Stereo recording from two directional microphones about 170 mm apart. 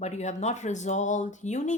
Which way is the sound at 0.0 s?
40° left (ahead or behind).